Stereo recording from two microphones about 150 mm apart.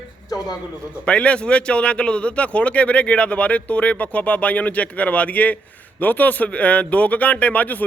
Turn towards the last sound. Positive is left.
turn(degrees=10)  # may be behind; listen again after turning